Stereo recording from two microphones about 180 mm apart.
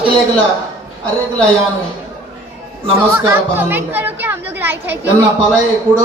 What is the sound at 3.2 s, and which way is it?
Speech, 10° right (ahead or behind).